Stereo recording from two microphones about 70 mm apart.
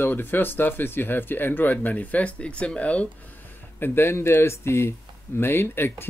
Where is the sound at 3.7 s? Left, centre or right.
Left.